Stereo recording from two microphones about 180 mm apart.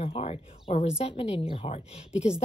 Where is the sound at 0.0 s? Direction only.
35° left (ahead or behind).